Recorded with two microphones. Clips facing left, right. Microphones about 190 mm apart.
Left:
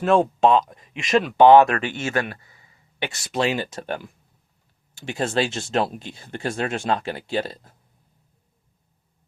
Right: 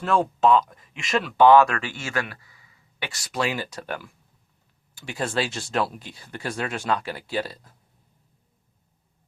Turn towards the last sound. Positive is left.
turn(degrees=25)  # may be behind; listen again after turning